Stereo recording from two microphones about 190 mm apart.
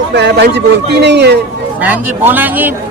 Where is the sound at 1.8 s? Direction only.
10° right (ahead or behind).